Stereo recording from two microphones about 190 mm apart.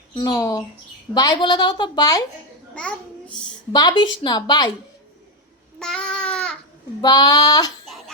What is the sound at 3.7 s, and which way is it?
A woman's voice, 20° left (ahead or behind).